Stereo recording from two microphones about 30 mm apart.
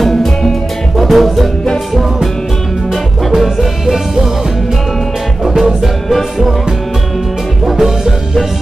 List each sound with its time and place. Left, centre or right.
0.1 s music: centre
0.9 s music: centre
3.3 s music: centre
5.4 s music: centre
7.7 s music: centre